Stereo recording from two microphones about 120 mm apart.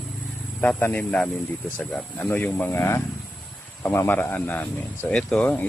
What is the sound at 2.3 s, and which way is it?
Speech, 15° left (ahead or behind).